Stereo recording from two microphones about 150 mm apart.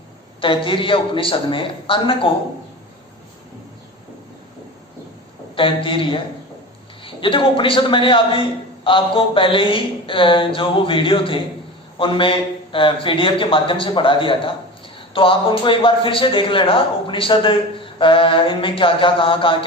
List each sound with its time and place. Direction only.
0.4 s a man's voice: 35° left (ahead or behind)
5.5 s a man's voice: 35° left (ahead or behind)